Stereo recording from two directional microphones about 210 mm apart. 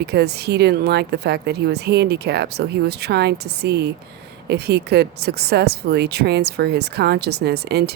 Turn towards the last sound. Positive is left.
turn(degrees=-50)  # may be behind; listen again after turning